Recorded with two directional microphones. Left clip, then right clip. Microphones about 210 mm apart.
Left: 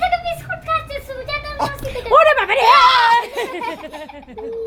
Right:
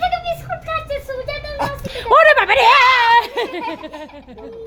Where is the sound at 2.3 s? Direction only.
20° right (ahead or behind).